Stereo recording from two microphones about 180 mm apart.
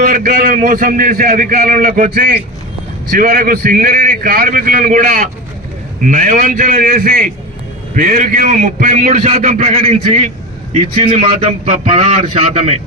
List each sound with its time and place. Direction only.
0.0 s a man's voice: 50° right (ahead or behind)